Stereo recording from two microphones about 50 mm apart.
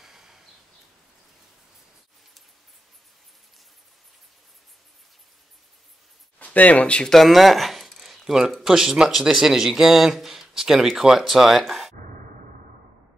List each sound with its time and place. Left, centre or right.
0.0 s a sound: centre
6.4 s speech: left
7.1 s speech: centre